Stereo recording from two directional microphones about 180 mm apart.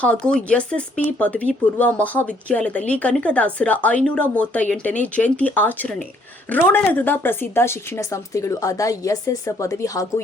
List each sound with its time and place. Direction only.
0.0 s speech: 5° left (ahead or behind)